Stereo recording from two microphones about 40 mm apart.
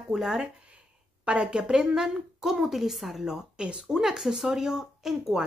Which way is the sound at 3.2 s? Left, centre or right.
Centre.